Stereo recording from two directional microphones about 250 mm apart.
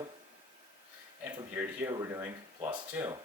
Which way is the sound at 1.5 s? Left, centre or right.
Centre.